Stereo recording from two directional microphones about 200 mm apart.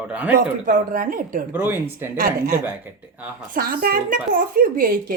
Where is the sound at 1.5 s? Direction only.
10° right (ahead or behind).